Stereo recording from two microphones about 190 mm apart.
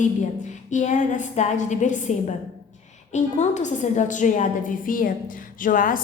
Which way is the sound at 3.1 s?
40° left (ahead or behind).